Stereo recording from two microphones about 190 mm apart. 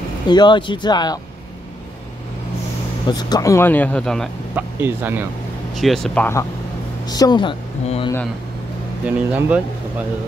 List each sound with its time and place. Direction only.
0.3 s speech: 25° left (ahead or behind)
3.1 s speech: 20° left (ahead or behind); by 4.3 s 5° left (ahead or behind)
4.6 s speech: 10° right (ahead or behind)
5.8 s speech: centre (ahead or behind)
7.1 s speech: 20° left (ahead or behind)
9.0 s speech: 5° right (ahead or behind)